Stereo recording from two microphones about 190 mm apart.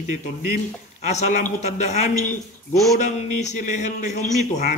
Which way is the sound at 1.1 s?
40° left (ahead or behind).